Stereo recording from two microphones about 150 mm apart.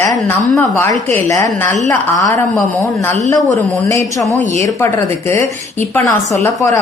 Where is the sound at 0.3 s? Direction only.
20° left (ahead or behind).